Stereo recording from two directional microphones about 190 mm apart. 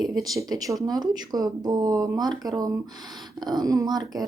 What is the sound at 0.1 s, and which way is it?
Speech, 20° right (ahead or behind).